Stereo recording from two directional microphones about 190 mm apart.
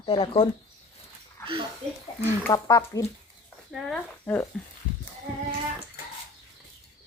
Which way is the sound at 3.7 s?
Centre (ahead or behind).